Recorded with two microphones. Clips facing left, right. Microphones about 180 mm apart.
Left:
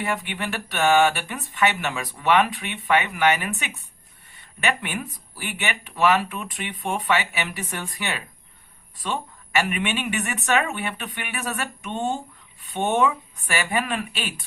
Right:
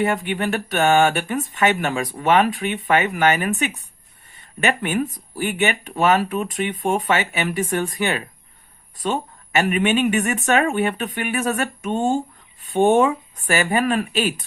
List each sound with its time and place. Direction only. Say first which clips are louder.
0.0 s speech: right 7 dB; 40° right (ahead or behind)